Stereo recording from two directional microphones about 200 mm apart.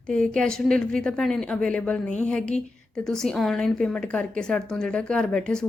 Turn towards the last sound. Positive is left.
turn(degrees=5)  # may be behind; listen again after turning